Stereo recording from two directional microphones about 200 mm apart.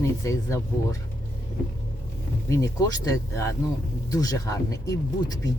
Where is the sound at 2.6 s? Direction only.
15° left (ahead or behind).